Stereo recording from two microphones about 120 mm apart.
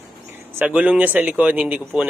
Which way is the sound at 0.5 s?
10° right (ahead or behind).